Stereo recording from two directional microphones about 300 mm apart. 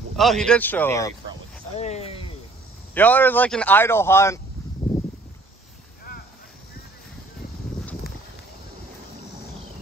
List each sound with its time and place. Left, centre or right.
0.1 s speech: centre
1.8 s speech: left
2.9 s speech: centre